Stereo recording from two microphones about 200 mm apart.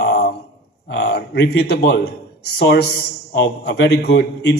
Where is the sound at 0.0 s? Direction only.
50° left (ahead or behind).